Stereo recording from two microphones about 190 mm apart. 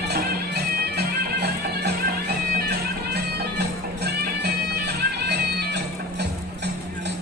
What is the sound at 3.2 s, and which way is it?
Music, 60° right (ahead or behind).